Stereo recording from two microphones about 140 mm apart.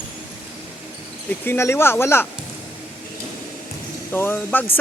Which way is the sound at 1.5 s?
20° left (ahead or behind).